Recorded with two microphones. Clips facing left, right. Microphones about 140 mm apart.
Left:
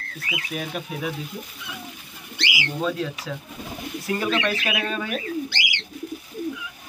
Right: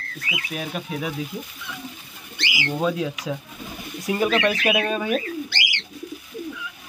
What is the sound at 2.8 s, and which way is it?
Speech, 15° right (ahead or behind).